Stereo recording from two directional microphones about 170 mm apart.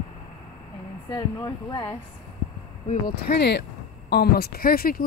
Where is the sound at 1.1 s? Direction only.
25° left (ahead or behind).